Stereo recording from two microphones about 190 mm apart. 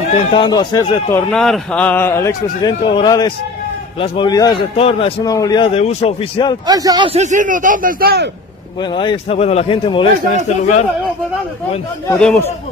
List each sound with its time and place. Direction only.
0.3 s a man's voice: 25° left (ahead or behind)
1.1 s a man's voice: 5° left (ahead or behind); by 6.5 s 30° left (ahead or behind)
6.7 s speech: 20° right (ahead or behind)
7.2 s a man's voice: 40° right (ahead or behind)
8.9 s a man's voice: 25° left (ahead or behind)
10.3 s a man's voice: 40° left (ahead or behind)
12.2 s speech: 5° left (ahead or behind)